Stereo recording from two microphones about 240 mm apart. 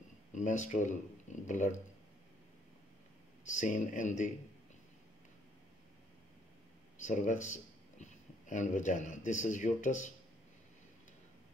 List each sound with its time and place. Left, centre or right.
0.3 s speech: left
3.4 s speech: left
7.0 s speech: left